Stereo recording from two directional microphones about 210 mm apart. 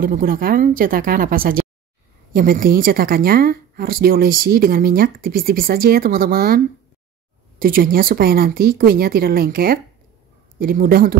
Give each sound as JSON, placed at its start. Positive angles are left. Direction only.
{"t": 0.0, "sound": "a woman's voice", "side_deg": -40}